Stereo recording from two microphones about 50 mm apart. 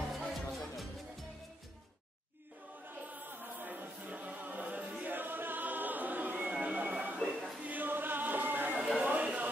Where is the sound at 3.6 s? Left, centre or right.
Right.